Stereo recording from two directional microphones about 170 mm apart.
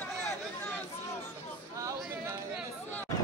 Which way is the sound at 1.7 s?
20° right (ahead or behind).